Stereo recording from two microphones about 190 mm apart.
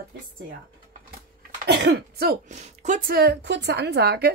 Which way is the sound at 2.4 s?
40° right (ahead or behind).